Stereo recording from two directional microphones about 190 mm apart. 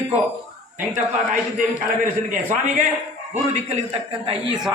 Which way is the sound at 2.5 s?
40° right (ahead or behind).